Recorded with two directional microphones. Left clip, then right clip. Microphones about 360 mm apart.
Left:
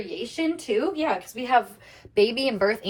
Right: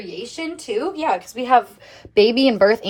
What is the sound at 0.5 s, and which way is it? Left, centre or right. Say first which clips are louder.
A woman's voice: right 4 dB; centre.